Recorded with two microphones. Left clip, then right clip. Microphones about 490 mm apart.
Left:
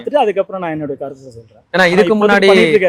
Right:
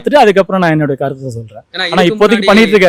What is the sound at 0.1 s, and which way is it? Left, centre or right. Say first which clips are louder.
Speech: right 7 dB; right.